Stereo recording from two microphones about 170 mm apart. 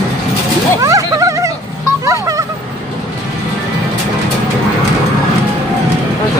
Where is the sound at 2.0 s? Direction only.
20° right (ahead or behind).